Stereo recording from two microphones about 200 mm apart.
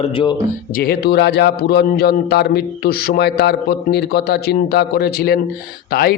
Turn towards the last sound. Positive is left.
turn(degrees=50)  # may be behind; listen again after turning